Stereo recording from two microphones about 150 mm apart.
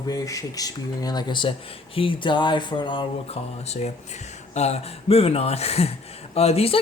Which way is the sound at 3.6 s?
45° left (ahead or behind).